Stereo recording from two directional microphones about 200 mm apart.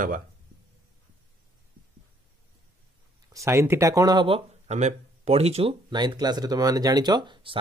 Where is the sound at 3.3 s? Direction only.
15° right (ahead or behind).